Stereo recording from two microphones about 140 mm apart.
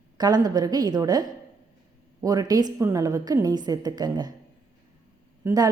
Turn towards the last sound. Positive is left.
turn(degrees=-25)  # may be behind; listen again after turning